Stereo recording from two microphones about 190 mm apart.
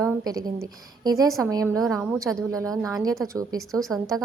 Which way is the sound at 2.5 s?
15° right (ahead or behind).